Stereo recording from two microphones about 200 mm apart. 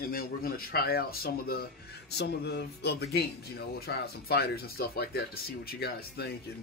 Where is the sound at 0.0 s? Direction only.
50° left (ahead or behind).